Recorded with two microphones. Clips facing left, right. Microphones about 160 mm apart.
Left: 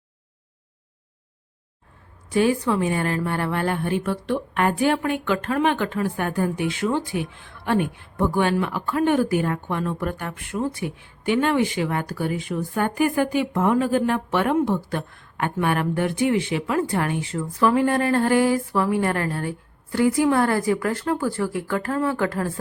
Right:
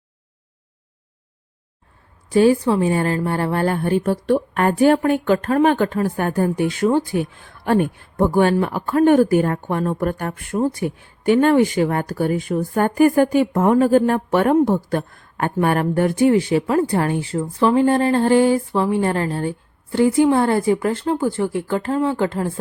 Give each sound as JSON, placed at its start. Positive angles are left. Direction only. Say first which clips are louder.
{"t": 2.3, "sound": "a woman's voice", "louder": "right 5 dB", "side_deg": -30}